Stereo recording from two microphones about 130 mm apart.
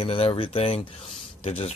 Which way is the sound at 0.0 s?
50° left (ahead or behind).